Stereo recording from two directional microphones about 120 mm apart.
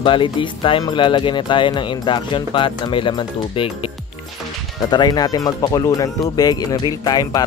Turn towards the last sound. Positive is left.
turn(degrees=35)  # may be behind; listen again after turning